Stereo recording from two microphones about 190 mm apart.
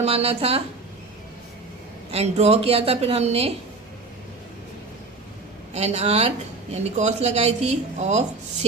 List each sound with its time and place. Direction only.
0.0 s speech: 35° right (ahead or behind)
2.0 s speech: 35° right (ahead or behind)
5.7 s speech: 35° right (ahead or behind)